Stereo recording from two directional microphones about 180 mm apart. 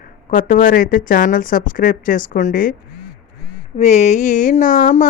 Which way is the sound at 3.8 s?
40° left (ahead or behind).